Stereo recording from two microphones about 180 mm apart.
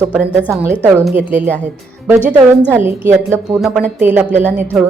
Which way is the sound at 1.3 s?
10° right (ahead or behind).